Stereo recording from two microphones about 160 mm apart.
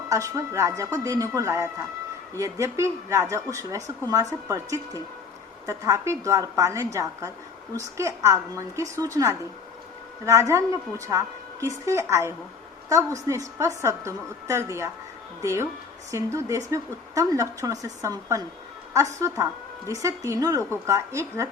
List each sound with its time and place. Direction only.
0.1 s a woman's voice: 20° right (ahead or behind)
19.9 s a woman's voice: 20° right (ahead or behind)